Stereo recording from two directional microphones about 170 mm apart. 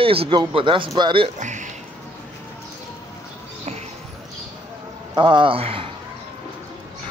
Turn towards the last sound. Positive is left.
turn(degrees=-35)  # may be behind; listen again after turning